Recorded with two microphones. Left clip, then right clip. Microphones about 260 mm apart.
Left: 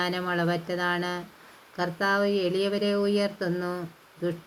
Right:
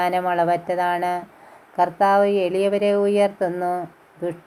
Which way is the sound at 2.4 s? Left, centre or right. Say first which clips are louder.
Right 7 dB; centre.